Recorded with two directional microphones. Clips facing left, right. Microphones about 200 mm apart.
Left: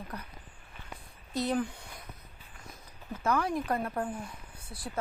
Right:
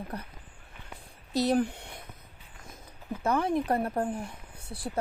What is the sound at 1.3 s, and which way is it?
Speech, 80° right.